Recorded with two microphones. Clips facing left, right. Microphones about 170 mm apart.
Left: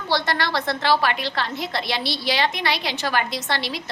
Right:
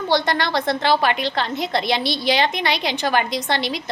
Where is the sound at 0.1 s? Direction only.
20° right (ahead or behind).